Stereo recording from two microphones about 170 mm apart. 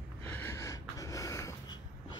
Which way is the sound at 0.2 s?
15° left (ahead or behind).